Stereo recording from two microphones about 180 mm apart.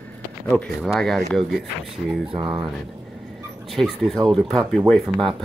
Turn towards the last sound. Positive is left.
turn(degrees=0)  # may be behind; listen again after turning